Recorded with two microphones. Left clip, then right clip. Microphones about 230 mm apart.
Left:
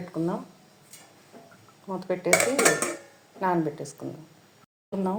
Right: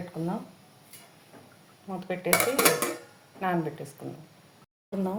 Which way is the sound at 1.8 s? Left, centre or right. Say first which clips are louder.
Left 4 dB; left.